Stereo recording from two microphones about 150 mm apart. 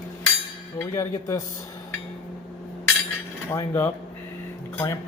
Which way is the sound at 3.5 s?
15° left (ahead or behind).